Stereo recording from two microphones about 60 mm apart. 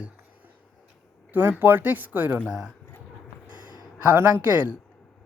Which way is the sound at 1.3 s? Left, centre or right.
Right.